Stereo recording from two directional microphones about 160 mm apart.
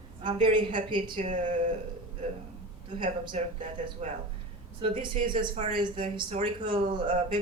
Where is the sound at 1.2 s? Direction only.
50° right (ahead or behind).